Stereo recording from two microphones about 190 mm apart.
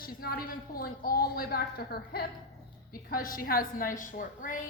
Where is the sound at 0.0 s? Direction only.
50° left (ahead or behind).